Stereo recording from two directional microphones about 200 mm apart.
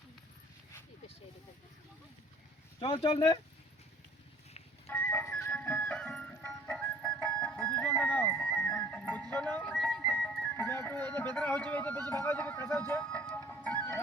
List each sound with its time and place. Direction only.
2.8 s speech: 25° left (ahead or behind)
4.9 s music: 10° left (ahead or behind)